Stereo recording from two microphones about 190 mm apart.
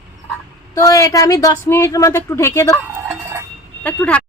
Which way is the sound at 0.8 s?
15° left (ahead or behind).